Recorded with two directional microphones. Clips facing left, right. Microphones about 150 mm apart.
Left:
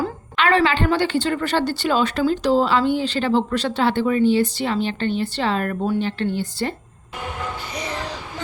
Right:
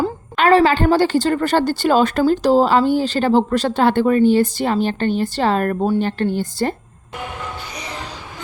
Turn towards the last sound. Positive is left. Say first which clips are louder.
# right 4 dB
turn(degrees=-45)  # may be behind; listen again after turning